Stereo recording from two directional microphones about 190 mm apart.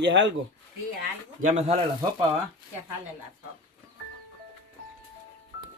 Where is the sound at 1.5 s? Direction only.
35° right (ahead or behind).